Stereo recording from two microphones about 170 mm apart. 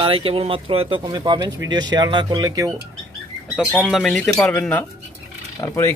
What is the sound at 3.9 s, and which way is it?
Speech, centre (ahead or behind).